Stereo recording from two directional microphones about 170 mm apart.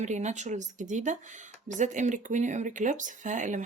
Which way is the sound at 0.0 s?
45° right (ahead or behind).